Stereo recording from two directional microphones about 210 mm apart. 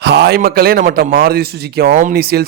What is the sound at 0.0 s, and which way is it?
A man's voice, 50° right (ahead or behind).